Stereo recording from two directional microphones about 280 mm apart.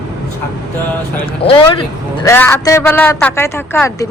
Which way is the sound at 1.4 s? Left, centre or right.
Centre.